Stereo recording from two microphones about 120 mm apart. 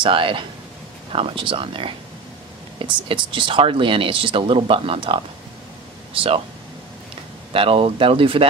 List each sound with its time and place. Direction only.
0.0 s speech: 45° right (ahead or behind)
7.5 s speech: 50° right (ahead or behind)